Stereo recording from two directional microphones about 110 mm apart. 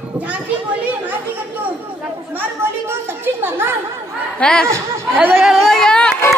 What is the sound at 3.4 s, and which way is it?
Speech, 20° right (ahead or behind).